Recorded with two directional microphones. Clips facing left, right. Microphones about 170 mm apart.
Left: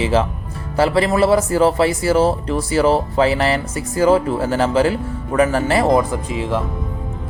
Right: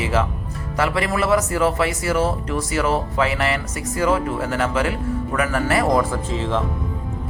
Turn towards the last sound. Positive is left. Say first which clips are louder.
# left 2 dB
turn(degrees=10)  # may be behind; listen again after turning